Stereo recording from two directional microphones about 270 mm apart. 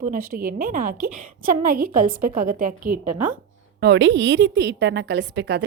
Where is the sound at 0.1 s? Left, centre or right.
Right.